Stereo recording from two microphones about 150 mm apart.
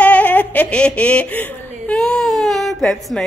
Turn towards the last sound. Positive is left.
turn(degrees=0)  # may be behind; listen again after turning